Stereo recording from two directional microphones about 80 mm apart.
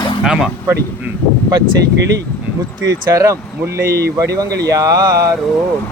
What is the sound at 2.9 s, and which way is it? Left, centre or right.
Speech, right.